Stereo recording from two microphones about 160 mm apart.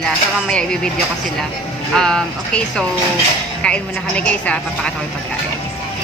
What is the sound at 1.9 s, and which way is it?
A woman's voice, 5° left (ahead or behind).